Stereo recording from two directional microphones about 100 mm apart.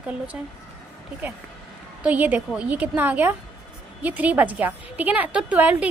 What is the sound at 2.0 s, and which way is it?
A woman's voice, 15° right (ahead or behind).